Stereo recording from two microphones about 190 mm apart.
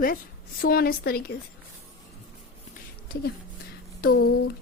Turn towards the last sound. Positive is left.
turn(degrees=55)  # may be behind; listen again after turning